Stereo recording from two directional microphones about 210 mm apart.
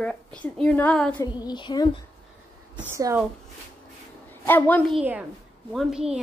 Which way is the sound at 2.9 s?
15° right (ahead or behind).